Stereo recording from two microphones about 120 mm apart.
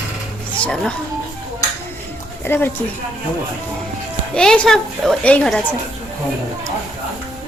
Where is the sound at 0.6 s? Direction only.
5° left (ahead or behind).